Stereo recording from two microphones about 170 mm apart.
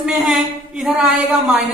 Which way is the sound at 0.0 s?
5° right (ahead or behind).